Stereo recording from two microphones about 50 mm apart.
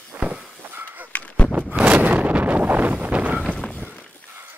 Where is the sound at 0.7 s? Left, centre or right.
Right.